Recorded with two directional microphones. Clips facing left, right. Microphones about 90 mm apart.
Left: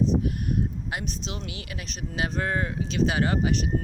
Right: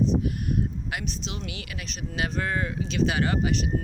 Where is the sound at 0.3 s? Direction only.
30° left (ahead or behind).